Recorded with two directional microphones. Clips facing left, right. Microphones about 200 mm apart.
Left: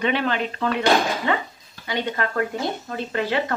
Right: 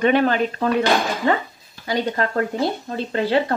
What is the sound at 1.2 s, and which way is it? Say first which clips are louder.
Speech: right 4 dB; 40° right (ahead or behind).